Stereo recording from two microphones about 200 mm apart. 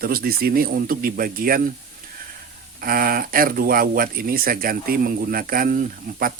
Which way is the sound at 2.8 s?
45° right (ahead or behind).